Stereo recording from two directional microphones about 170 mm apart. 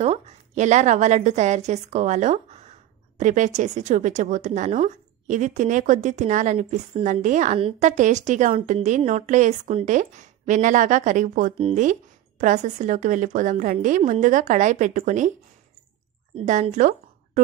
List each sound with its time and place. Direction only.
0.0 s a woman's voice: 40° right (ahead or behind)
11.5 s speech: 35° right (ahead or behind)
11.8 s a woman's voice: 45° right (ahead or behind)
16.3 s a woman's voice: 40° right (ahead or behind)